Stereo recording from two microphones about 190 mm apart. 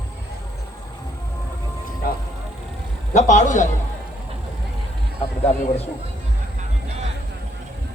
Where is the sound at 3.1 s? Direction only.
40° left (ahead or behind).